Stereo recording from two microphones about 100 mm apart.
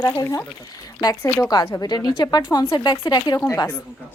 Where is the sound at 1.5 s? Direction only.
40° left (ahead or behind).